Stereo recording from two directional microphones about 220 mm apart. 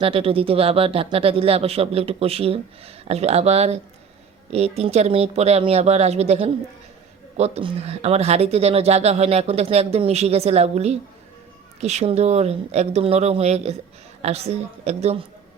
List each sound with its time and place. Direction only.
0.0 s speech: 25° right (ahead or behind)